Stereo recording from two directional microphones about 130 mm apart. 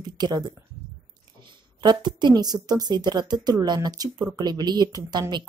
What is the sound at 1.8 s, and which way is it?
Speech, 35° right (ahead or behind).